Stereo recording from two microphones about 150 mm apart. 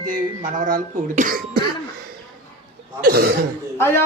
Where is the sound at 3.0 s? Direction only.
85° right.